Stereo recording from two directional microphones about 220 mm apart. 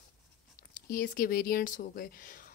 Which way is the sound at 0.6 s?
40° left (ahead or behind).